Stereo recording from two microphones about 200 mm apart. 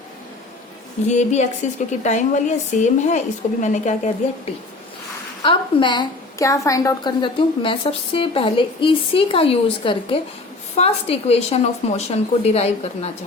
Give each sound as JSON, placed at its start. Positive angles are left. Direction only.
{"t": 1.0, "sound": "a woman's voice", "side_deg": 35}
{"t": 5.4, "sound": "a woman's voice", "side_deg": 25}